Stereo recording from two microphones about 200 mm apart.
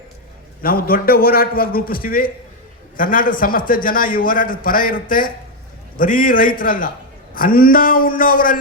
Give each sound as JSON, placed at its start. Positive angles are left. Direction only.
{"t": 0.6, "sound": "a man's voice", "side_deg": 45}